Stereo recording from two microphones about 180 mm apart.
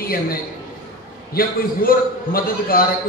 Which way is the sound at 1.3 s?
55° left (ahead or behind).